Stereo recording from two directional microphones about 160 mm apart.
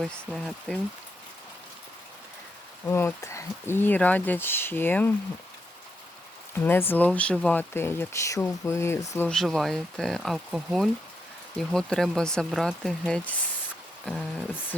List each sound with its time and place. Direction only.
0.0 s speech: centre (ahead or behind)
2.8 s speech: 15° left (ahead or behind)
6.6 s speech: 15° left (ahead or behind)
9.3 s speech: centre (ahead or behind)